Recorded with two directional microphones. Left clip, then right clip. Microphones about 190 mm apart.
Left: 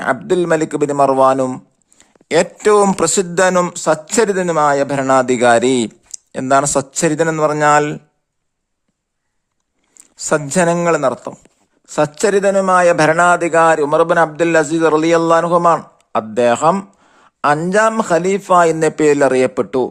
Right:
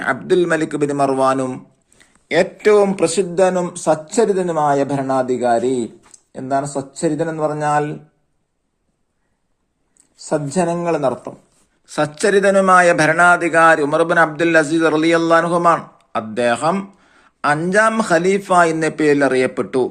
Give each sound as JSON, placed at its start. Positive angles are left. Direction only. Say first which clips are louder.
{"t": 0.0, "sound": "speech", "louder": "left 1 dB", "side_deg": 50}
{"t": 3.0, "sound": "a man's voice", "louder": "left 1 dB", "side_deg": 65}
{"t": 3.3, "sound": "a man's voice", "louder": "left 3 dB", "side_deg": 40}
{"t": 10.2, "sound": "a man's voice", "louder": "left 4 dB", "side_deg": 50}
{"t": 11.9, "sound": "a man's voice", "louder": "left 2 dB", "side_deg": 55}